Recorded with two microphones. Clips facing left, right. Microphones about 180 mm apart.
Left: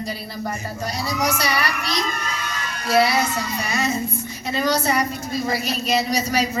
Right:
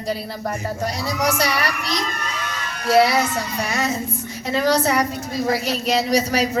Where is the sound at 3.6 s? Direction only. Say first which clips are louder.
Left 1 dB; 85° right.